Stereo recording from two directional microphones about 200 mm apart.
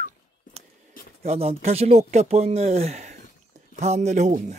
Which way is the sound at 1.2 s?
30° right (ahead or behind).